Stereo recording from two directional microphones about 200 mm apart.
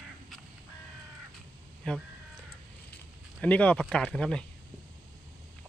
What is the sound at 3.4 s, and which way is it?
Speech, 5° left (ahead or behind).